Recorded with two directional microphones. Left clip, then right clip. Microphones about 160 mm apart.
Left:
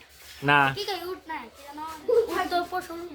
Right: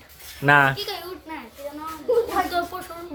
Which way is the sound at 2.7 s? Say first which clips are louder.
Left 3 dB; 10° left (ahead or behind).